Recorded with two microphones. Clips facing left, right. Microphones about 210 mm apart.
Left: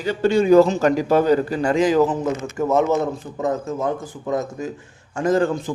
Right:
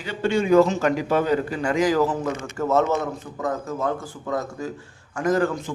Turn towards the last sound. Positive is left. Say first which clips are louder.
# left 3 dB
turn(degrees=25)  # may be behind; listen again after turning